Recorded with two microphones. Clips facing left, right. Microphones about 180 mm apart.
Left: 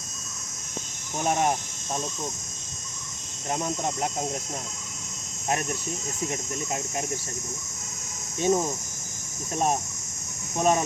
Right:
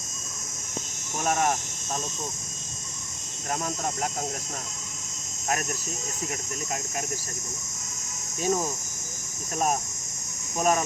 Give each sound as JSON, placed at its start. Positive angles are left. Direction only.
{"t": 1.2, "sound": "speech", "side_deg": 20}
{"t": 3.5, "sound": "speech", "side_deg": 20}
{"t": 5.5, "sound": "speech", "side_deg": 25}
{"t": 8.4, "sound": "speech", "side_deg": 25}
{"t": 10.6, "sound": "speech", "side_deg": 25}